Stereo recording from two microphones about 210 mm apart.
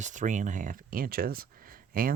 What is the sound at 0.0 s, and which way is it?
Speech, 35° right (ahead or behind).